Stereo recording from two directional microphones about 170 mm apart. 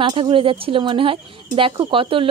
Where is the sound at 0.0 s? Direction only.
30° right (ahead or behind).